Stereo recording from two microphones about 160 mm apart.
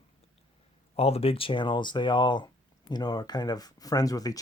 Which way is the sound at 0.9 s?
40° left (ahead or behind).